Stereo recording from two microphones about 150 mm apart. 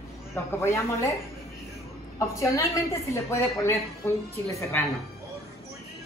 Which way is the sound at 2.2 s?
20° left (ahead or behind).